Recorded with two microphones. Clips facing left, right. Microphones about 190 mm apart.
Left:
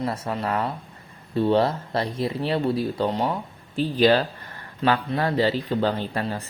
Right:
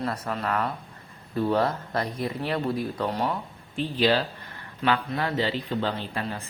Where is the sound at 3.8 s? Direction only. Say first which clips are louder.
Left 4 dB; 45° left (ahead or behind).